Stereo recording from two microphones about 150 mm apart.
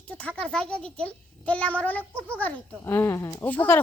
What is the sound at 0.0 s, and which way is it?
Speech, 10° left (ahead or behind).